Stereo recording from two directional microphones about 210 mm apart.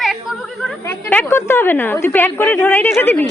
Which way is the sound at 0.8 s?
10° left (ahead or behind).